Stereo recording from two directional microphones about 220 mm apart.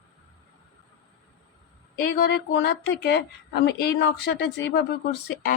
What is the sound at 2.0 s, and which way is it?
A woman's voice, 45° left (ahead or behind).